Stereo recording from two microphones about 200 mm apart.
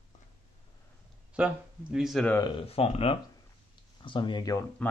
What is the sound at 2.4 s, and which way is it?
Speech, 25° left (ahead or behind).